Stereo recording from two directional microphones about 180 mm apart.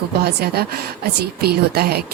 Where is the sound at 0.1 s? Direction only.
60° right (ahead or behind).